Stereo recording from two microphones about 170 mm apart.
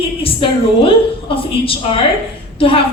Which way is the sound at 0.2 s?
35° left (ahead or behind).